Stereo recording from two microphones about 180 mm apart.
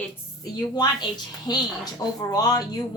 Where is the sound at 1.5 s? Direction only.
25° left (ahead or behind).